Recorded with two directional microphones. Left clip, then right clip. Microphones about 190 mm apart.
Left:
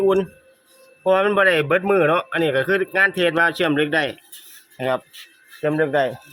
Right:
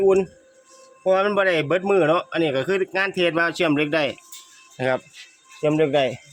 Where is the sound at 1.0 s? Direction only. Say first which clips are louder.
Left 3 dB; 5° right (ahead or behind).